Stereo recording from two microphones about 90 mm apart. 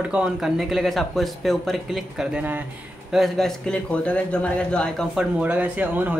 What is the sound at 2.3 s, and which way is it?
Speech, 20° right (ahead or behind).